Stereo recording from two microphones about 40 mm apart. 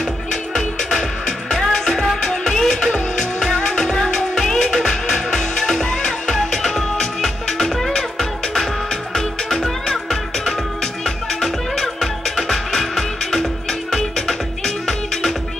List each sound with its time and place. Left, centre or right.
0.3 s music: centre